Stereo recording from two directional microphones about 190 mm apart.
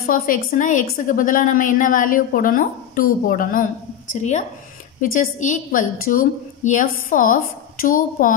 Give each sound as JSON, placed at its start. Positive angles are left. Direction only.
{"t": 0.0, "sound": "a woman's voice", "side_deg": 45}